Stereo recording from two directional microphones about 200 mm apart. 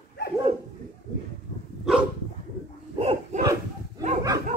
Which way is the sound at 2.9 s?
30° right (ahead or behind).